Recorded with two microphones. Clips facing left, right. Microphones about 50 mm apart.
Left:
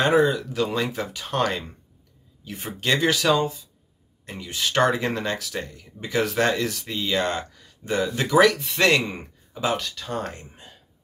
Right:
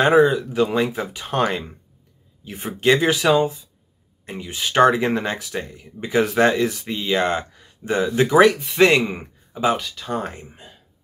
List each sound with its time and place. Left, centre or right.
0.2 s speech: centre
8.5 s speech: centre
8.8 s speech: centre